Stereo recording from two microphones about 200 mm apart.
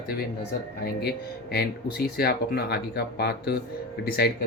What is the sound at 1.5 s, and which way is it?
Speech, 55° left (ahead or behind).